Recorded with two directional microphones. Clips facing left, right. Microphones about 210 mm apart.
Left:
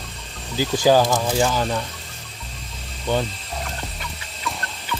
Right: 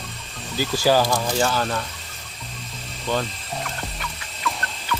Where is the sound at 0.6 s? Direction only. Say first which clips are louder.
Left 3 dB; 15° left (ahead or behind).